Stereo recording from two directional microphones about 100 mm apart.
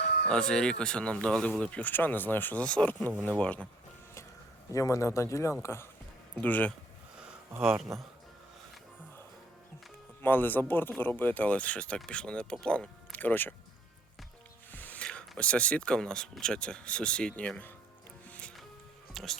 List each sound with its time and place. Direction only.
0.3 s speech: 10° left (ahead or behind)
4.7 s speech: 35° left (ahead or behind); by 6.7 s 15° left (ahead or behind)
7.9 s speech: centre (ahead or behind)
10.2 s speech: 20° left (ahead or behind)
14.7 s speech: 15° left (ahead or behind)
18.3 s music: 10° left (ahead or behind)